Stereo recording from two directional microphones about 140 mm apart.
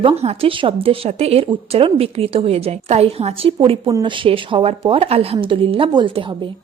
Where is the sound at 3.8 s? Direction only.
30° right (ahead or behind).